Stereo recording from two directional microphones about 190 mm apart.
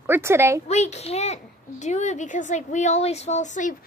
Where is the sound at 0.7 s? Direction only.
35° left (ahead or behind).